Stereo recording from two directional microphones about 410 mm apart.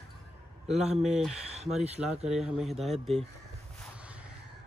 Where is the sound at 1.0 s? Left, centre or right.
Centre.